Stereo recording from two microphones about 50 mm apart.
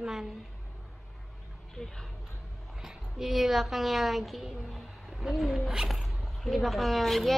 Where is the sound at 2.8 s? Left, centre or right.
Centre.